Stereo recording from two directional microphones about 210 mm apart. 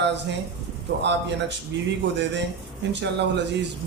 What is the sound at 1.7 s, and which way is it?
Speech, 60° right (ahead or behind).